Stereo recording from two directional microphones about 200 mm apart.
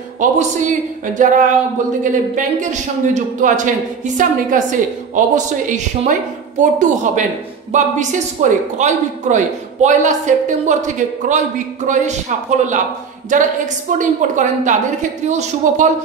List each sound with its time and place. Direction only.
0.2 s a man's voice: 40° right (ahead or behind)